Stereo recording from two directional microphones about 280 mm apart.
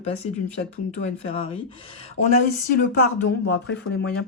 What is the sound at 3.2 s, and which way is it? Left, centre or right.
Mantra, left.